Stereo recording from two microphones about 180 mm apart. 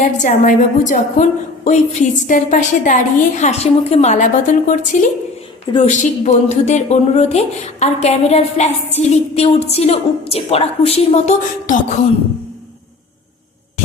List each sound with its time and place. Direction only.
0.0 s a woman's voice: 45° left (ahead or behind)